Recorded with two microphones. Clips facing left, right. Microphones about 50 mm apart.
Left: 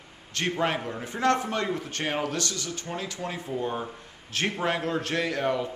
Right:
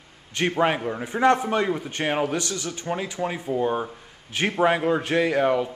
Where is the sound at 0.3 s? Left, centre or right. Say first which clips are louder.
Right 5 dB; centre.